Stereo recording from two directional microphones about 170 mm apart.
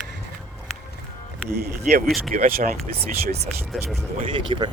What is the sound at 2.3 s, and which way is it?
Speech, 55° right (ahead or behind).